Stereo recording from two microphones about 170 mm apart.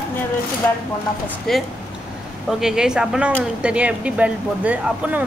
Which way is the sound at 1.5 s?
Centre (ahead or behind).